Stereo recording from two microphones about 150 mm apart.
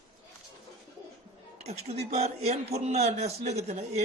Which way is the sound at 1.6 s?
45° right (ahead or behind).